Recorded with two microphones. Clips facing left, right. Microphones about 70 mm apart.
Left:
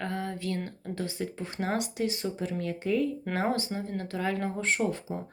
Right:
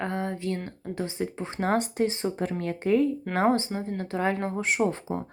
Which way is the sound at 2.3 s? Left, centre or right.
Right.